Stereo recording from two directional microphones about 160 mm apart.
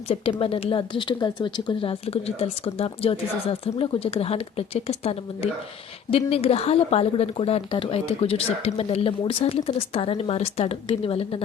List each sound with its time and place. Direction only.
0.1 s a woman's voice: 35° left (ahead or behind)